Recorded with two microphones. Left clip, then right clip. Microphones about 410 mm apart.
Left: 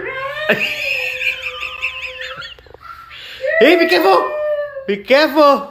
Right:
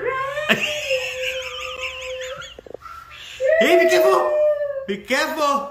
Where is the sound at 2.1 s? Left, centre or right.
Centre.